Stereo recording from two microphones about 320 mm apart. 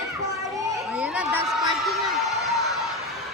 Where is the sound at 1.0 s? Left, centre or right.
Centre.